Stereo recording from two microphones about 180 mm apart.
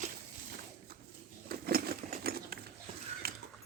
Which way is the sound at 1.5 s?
55° right (ahead or behind).